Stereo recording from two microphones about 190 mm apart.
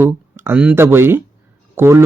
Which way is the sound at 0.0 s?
10° right (ahead or behind).